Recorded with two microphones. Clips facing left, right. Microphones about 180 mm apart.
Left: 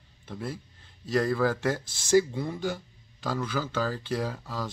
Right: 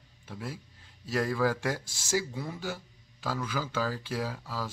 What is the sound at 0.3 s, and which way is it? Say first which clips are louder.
A man's voice: left 4 dB; 10° right (ahead or behind).